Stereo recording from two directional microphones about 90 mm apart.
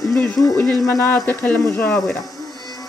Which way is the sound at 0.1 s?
20° left (ahead or behind).